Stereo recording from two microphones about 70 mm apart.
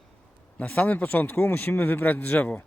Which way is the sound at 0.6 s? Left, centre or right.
Left.